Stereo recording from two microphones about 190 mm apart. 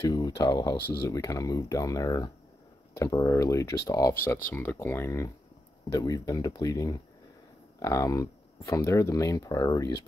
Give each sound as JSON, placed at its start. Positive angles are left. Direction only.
{"t": 0.1, "sound": "speech", "side_deg": 20}